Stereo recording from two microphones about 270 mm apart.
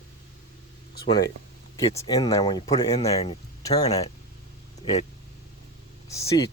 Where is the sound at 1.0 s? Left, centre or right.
Centre.